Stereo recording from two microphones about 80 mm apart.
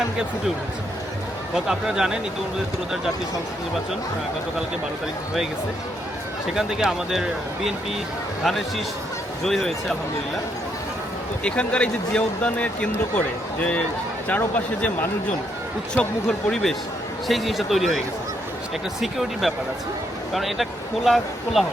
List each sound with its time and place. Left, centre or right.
1.5 s speech: centre
6.5 s speech: centre
11.4 s speech: centre
14.3 s speech: centre
16.5 s speech: centre